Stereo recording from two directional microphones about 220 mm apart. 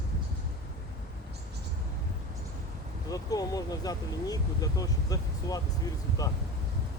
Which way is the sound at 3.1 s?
15° left (ahead or behind).